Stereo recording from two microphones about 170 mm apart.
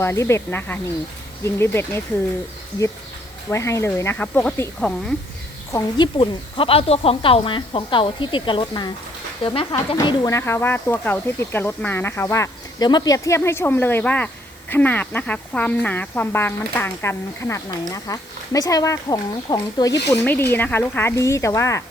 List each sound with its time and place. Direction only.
0.0 s speech: 15° left (ahead or behind)
3.5 s speech: 15° left (ahead or behind)
5.7 s speech: 30° left (ahead or behind)
10.3 s speech: 15° left (ahead or behind)